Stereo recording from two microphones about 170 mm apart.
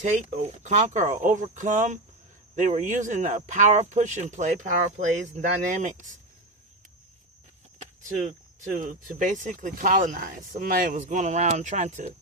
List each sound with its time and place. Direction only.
0.0 s speech: 45° right (ahead or behind)
8.6 s speech: 50° right (ahead or behind)